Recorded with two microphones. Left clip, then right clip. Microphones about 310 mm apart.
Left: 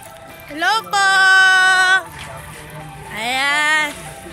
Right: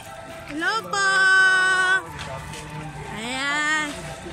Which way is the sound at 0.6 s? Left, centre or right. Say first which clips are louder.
Left 7 dB; centre.